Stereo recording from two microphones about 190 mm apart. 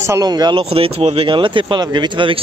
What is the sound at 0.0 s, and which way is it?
Speech, 15° right (ahead or behind).